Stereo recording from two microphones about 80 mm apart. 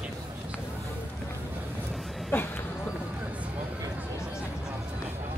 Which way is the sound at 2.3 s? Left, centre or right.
Left.